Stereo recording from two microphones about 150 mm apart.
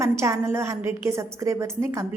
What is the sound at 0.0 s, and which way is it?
Speech, 20° right (ahead or behind).